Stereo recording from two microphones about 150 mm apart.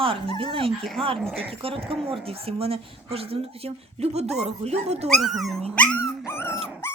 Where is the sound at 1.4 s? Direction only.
40° right (ahead or behind).